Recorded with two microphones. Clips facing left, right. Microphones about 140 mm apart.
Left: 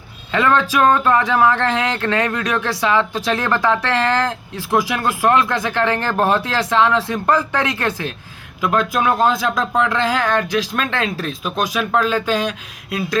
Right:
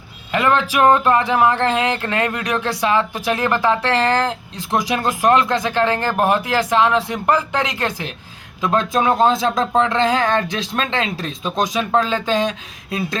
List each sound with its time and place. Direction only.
0.3 s speech: 15° right (ahead or behind)